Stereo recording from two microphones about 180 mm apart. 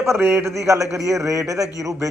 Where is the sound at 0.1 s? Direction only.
15° right (ahead or behind).